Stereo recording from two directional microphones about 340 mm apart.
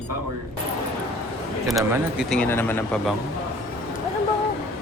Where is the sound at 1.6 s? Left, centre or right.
Centre.